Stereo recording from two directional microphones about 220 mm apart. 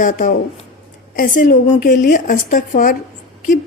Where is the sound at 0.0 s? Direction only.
35° left (ahead or behind).